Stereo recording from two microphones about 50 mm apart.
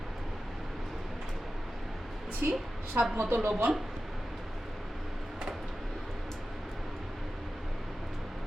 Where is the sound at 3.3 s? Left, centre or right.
Right.